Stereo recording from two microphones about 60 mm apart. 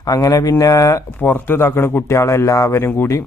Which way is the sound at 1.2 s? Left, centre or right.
Left.